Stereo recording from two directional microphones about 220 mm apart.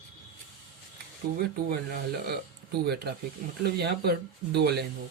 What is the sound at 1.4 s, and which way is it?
Speech, 45° right (ahead or behind).